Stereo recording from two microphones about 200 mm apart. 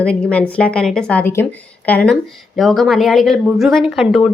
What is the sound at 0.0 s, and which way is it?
A woman's voice, 5° left (ahead or behind).